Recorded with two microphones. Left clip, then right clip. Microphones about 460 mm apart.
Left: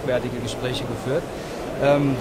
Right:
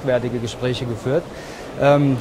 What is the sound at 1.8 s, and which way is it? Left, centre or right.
Speech, right.